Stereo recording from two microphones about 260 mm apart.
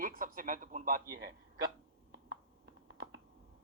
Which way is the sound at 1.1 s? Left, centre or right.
Right.